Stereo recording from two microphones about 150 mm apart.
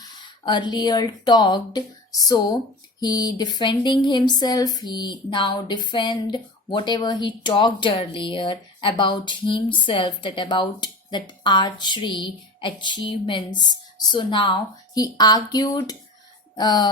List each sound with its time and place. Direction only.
0.0 s speech: 30° left (ahead or behind)